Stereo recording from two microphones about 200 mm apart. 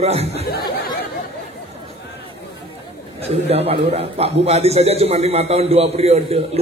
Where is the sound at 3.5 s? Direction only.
30° right (ahead or behind).